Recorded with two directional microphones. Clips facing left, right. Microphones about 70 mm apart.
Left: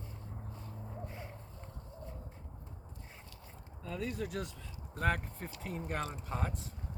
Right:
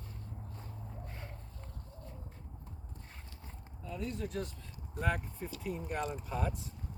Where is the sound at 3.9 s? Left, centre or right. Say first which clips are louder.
Left 1 dB; left.